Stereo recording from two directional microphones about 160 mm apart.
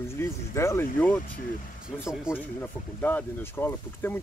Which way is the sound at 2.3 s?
5° right (ahead or behind).